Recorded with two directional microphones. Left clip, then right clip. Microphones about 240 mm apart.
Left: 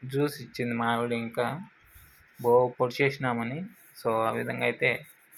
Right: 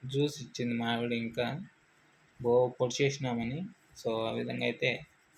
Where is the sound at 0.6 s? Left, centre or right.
Centre.